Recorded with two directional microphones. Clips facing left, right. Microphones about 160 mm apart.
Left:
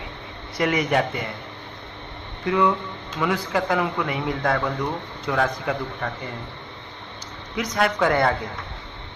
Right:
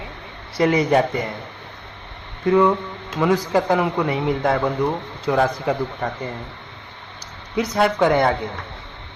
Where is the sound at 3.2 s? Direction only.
30° right (ahead or behind).